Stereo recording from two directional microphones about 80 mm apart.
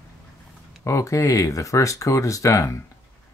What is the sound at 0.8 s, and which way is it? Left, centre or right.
Speech, left.